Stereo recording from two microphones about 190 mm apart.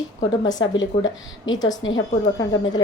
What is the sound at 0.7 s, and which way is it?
A woman's voice, 85° left.